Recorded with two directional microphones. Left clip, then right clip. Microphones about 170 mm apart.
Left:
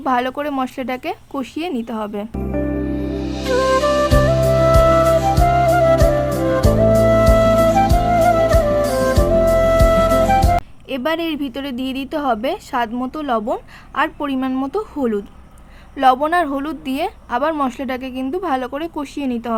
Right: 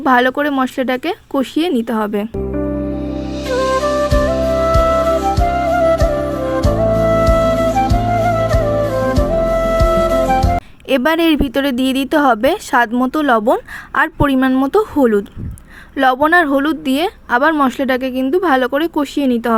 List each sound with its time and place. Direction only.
0.0 s speech: 25° right (ahead or behind)
2.9 s music: centre (ahead or behind)
10.8 s speech: 45° right (ahead or behind); by 19.5 s 30° right (ahead or behind)